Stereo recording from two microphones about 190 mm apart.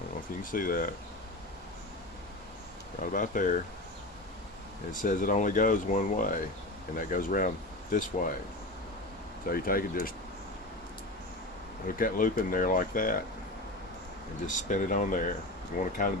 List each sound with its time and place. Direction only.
0.5 s speech: 45° left (ahead or behind)
3.0 s speech: 45° left (ahead or behind)
4.9 s speech: 45° left (ahead or behind)
9.5 s speech: 50° left (ahead or behind)
11.9 s speech: 45° left (ahead or behind)
14.4 s speech: 40° left (ahead or behind)